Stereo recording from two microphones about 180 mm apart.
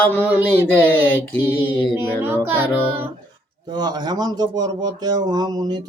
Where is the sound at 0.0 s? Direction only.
10° left (ahead or behind).